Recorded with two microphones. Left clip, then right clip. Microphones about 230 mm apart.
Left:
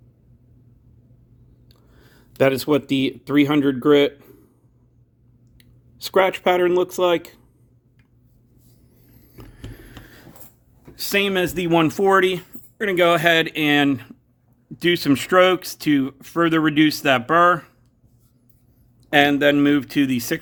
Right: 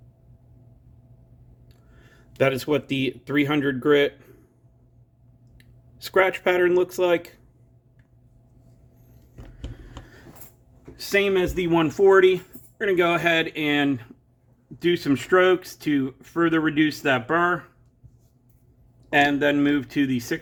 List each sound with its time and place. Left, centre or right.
1.6 s speech: left
5.5 s speech: left
9.3 s a sound: left
10.9 s speech: left
19.1 s speech: left